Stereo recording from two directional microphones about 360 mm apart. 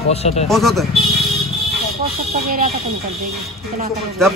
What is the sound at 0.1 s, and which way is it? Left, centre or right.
Speech, centre.